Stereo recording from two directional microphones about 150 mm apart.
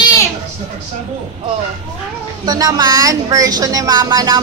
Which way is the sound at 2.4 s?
25° right (ahead or behind).